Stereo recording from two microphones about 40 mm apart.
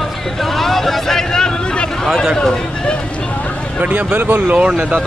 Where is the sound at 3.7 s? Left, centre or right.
Right.